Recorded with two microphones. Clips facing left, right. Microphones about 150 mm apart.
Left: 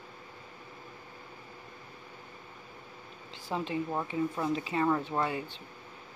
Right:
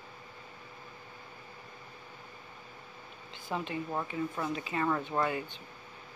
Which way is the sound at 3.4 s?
30° left (ahead or behind).